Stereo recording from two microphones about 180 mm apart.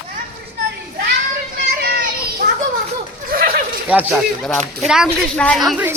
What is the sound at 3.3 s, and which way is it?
Chuckle, 55° right (ahead or behind).